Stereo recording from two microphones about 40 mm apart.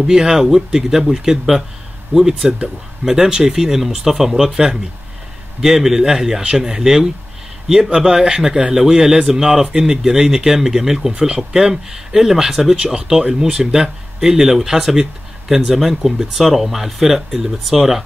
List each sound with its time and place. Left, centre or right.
0.0 s speech: centre
5.6 s speech: centre
11.1 s speech: right
12.7 s speech: right; by 18.0 s centre